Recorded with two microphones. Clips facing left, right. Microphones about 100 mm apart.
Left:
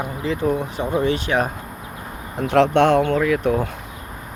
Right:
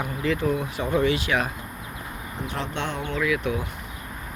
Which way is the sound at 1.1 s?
40° left (ahead or behind).